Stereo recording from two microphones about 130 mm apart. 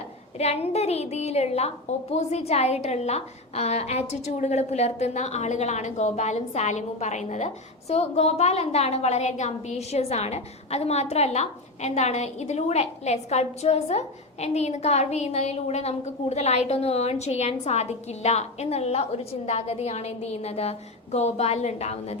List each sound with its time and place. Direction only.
0.3 s a woman's voice: 55° left (ahead or behind)